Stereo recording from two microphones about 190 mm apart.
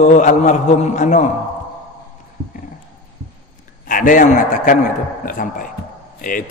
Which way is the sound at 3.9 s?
45° left (ahead or behind).